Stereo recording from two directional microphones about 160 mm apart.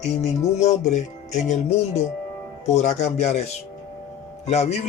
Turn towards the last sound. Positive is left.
turn(degrees=45)  # may be behind; listen again after turning